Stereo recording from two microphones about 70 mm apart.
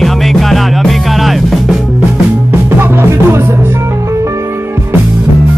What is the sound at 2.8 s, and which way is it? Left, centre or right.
Music, right.